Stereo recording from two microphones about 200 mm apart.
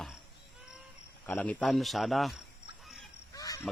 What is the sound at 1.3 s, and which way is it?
Speech, 5° left (ahead or behind).